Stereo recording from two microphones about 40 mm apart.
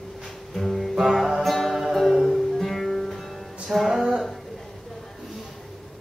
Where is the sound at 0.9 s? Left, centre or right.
Centre.